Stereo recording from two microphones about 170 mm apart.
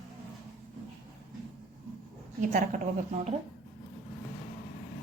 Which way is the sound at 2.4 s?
50° right (ahead or behind).